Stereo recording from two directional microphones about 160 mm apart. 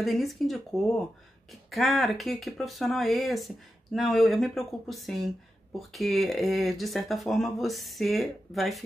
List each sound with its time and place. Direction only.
0.0 s speech: centre (ahead or behind)